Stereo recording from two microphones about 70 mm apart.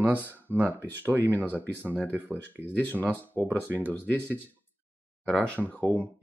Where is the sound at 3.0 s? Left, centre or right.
Left.